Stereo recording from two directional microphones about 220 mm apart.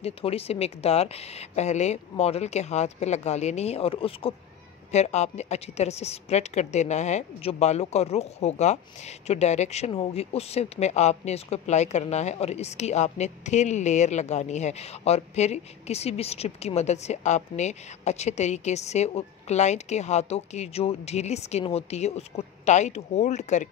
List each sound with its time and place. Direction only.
0.0 s speech: 25° left (ahead or behind)